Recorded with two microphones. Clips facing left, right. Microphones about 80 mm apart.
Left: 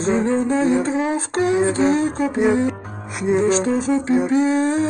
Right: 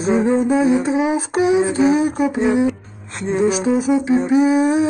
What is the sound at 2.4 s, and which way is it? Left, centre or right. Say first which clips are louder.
Speech: even; centre.